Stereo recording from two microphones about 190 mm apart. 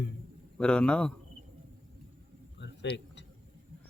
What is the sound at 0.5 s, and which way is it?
Speech, 5° left (ahead or behind).